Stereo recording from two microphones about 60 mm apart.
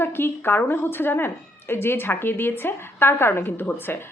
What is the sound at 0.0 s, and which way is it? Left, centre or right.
A woman's voice, left.